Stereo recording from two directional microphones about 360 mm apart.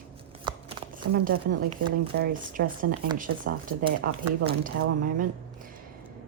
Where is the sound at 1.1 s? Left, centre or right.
Right.